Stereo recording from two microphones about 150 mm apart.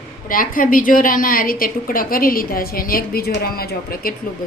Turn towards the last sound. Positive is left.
turn(degrees=85)